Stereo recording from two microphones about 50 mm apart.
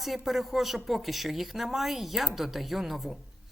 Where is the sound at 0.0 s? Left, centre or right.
Centre.